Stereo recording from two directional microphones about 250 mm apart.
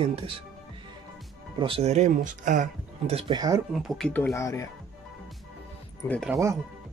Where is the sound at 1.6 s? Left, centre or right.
Right.